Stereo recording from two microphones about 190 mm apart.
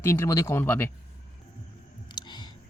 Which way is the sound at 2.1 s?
20° left (ahead or behind).